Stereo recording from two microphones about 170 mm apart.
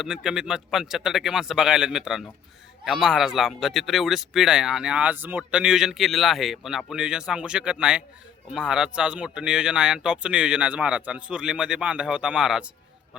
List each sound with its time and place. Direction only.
0.0 s speech: 5° right (ahead or behind)